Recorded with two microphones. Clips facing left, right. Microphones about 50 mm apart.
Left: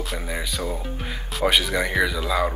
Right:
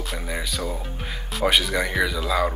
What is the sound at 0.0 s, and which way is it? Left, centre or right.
Speech, centre.